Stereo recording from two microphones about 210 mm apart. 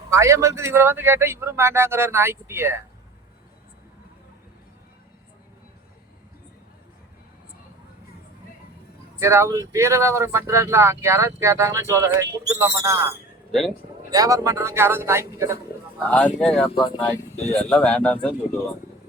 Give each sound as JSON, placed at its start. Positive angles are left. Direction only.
{"t": 0.1, "sound": "speech", "side_deg": -15}
{"t": 9.1, "sound": "speech", "side_deg": -15}
{"t": 13.5, "sound": "a man's voice", "side_deg": 0}
{"t": 14.1, "sound": "speech", "side_deg": -15}
{"t": 16.0, "sound": "speech", "side_deg": 5}
{"t": 16.6, "sound": "speech", "side_deg": 25}
{"t": 17.7, "sound": "speech", "side_deg": 5}